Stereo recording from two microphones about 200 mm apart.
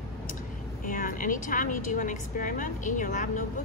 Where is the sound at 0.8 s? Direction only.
45° left (ahead or behind).